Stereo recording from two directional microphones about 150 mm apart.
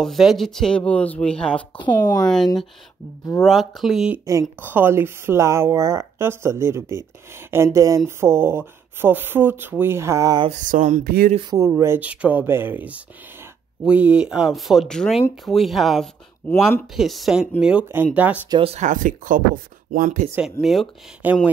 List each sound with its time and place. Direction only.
0.0 s speech: centre (ahead or behind)
1.8 s speech: 25° left (ahead or behind)
2.2 s speech: 5° left (ahead or behind)
4.3 s speech: 15° right (ahead or behind)
10.5 s speech: 60° right (ahead or behind)
11.1 s speech: 75° right (ahead or behind)
11.5 s speech: 20° right (ahead or behind); by 16.1 s centre (ahead or behind)
16.4 s speech: 15° left (ahead or behind)
16.9 s speech: centre (ahead or behind)
18.6 s speech: 40° right (ahead or behind)
18.9 s speech: 60° right (ahead or behind)
20.6 s speech: centre (ahead or behind)
21.2 s speech: 10° right (ahead or behind)